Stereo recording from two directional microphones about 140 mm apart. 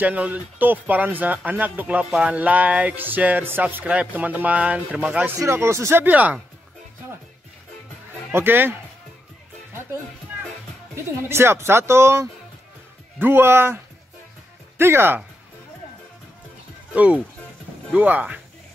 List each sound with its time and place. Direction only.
0.0 s speech: 10° right (ahead or behind)
8.3 s speech: 15° right (ahead or behind)
11.0 s speech: 20° right (ahead or behind)
14.8 s speech: 15° right (ahead or behind)
16.9 s speech: 10° right (ahead or behind)